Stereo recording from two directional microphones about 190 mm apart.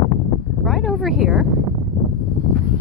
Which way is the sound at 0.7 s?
Centre (ahead or behind).